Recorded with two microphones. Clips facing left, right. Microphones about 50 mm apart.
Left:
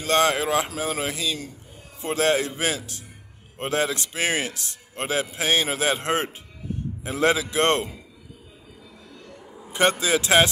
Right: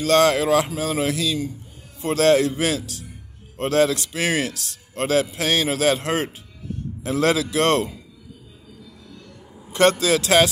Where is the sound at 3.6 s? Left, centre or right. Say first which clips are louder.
Right 6 dB; left.